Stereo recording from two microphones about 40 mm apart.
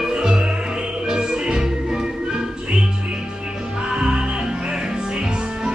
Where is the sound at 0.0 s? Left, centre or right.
Centre.